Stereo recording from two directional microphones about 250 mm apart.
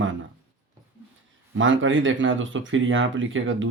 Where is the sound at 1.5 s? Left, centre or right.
Right.